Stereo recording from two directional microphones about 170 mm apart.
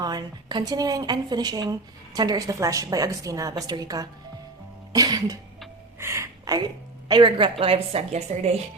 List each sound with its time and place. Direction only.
0.0 s a woman's voice: 25° right (ahead or behind)